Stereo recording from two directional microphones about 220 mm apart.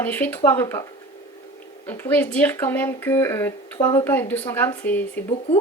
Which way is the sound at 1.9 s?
10° left (ahead or behind).